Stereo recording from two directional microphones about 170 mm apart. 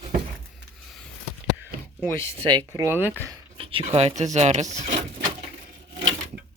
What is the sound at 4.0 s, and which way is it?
Speech, 40° right (ahead or behind).